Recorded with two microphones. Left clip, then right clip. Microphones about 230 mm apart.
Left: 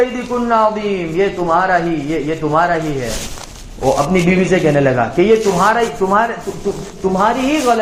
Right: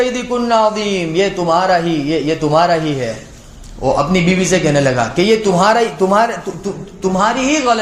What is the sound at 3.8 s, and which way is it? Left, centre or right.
A man's voice, right.